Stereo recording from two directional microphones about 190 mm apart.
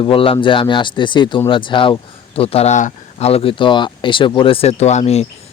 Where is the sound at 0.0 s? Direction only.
30° left (ahead or behind).